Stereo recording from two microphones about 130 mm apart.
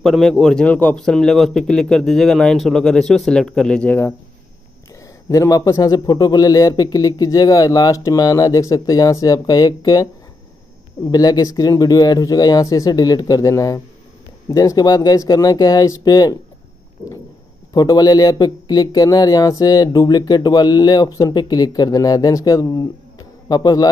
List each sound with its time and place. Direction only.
0.0 s a man's voice: centre (ahead or behind)
5.3 s a man's voice: 25° left (ahead or behind)
11.1 s a man's voice: 30° left (ahead or behind)
17.7 s a man's voice: 30° left (ahead or behind)